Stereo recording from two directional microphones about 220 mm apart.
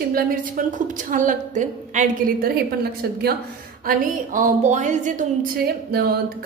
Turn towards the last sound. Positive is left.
turn(degrees=-45)  # may be behind; listen again after turning